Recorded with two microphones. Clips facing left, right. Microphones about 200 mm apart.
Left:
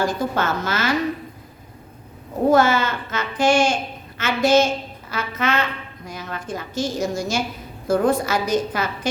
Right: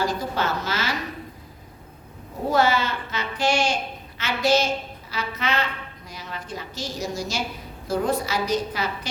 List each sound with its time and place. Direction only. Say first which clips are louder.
0.0 s a woman's voice: left 3 dB; 50° left (ahead or behind)
2.5 s a woman's voice: left 4 dB; 50° left (ahead or behind)